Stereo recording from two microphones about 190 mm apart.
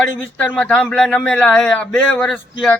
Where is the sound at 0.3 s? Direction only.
10° left (ahead or behind).